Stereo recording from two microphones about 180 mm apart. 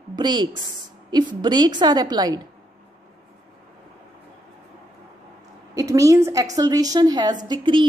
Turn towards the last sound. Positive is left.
turn(degrees=-25)  # may be behind; listen again after turning